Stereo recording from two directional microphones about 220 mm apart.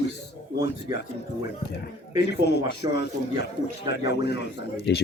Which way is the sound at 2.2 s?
50° left (ahead or behind).